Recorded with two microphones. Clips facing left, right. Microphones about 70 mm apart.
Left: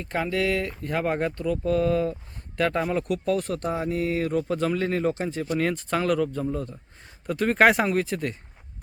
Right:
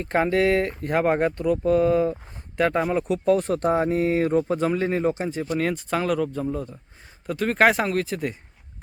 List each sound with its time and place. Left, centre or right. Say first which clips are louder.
0.0 s speech: right 5 dB; right; by 3.2 s centre
3.2 s speech: right 5 dB; right; by 8.4 s centre